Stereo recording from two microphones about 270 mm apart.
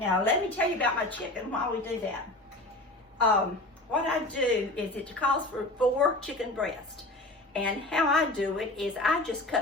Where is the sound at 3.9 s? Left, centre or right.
Centre.